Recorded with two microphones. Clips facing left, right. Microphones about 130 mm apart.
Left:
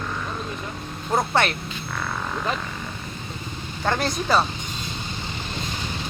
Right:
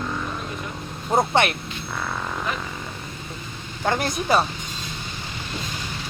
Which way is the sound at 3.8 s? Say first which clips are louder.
Right 1 dB; 15° right (ahead or behind).